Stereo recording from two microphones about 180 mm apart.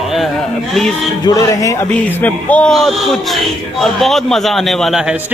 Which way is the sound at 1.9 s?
5° left (ahead or behind).